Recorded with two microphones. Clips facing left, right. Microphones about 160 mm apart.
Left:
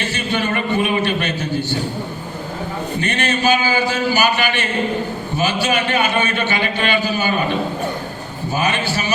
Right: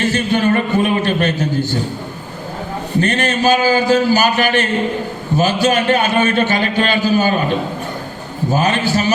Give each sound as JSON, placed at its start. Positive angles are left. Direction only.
{"t": 0.0, "sound": "a sound", "side_deg": -40}
{"t": 3.0, "sound": "a man's voice", "side_deg": -40}
{"t": 8.4, "sound": "a man's voice", "side_deg": -40}